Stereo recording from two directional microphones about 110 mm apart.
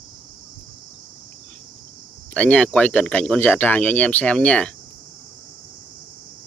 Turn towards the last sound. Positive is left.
turn(degrees=10)  # may be behind; listen again after turning